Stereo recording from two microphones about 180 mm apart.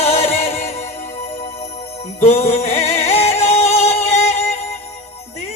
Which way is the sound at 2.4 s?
35° left (ahead or behind).